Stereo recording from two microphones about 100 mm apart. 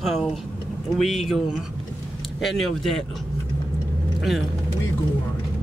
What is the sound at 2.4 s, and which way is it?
Speech, centre (ahead or behind).